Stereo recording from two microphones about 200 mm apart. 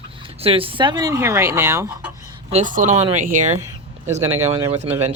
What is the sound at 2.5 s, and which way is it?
Speech, 40° right (ahead or behind).